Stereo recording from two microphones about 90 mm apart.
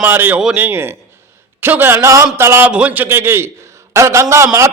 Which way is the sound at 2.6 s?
15° right (ahead or behind).